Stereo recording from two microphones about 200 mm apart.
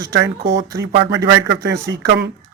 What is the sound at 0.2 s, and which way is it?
A man's voice, 60° right (ahead or behind).